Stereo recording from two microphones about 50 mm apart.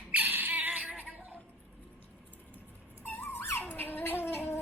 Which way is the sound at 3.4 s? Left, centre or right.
Left.